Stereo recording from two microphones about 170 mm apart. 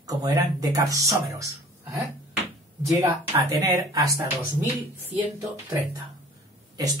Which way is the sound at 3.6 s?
25° right (ahead or behind).